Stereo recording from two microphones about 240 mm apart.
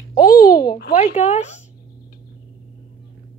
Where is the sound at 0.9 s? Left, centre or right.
Left.